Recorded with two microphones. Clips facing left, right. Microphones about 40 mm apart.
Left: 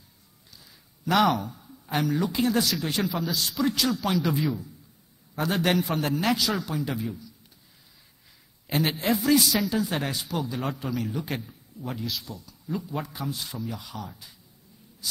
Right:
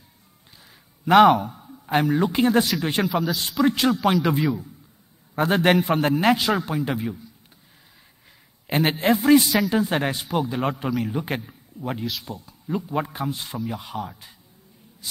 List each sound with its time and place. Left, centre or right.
1.0 s a man's voice: right
3.1 s a man's voice: centre
3.6 s a man's voice: right
8.6 s a man's voice: right